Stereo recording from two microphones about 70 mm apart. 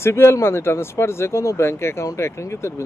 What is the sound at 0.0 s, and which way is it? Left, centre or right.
Speech, left.